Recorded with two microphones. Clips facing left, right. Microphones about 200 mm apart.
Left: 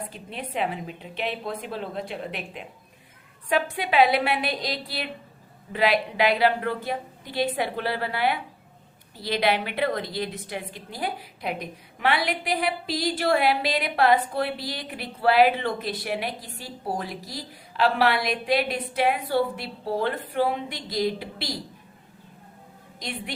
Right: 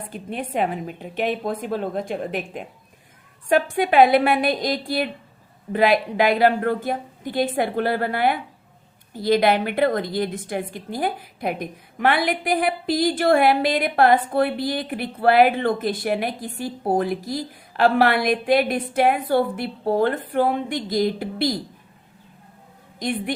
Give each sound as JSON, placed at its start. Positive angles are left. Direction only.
{"t": 0.1, "sound": "a woman's voice", "side_deg": -50}
{"t": 23.0, "sound": "a woman's voice", "side_deg": -50}